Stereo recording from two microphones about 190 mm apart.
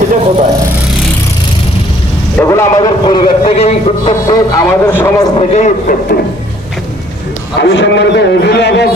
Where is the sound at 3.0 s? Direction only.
25° left (ahead or behind).